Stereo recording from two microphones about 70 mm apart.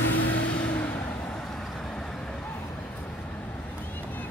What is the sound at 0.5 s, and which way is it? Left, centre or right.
Vehicle, centre.